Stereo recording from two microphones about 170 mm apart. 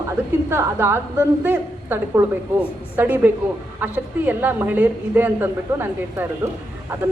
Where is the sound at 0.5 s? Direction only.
15° right (ahead or behind).